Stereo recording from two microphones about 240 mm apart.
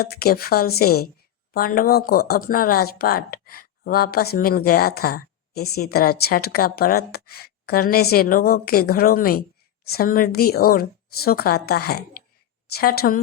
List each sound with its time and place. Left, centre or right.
0.0 s a woman's voice: left